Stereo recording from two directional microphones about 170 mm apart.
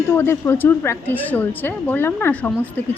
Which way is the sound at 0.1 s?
15° left (ahead or behind).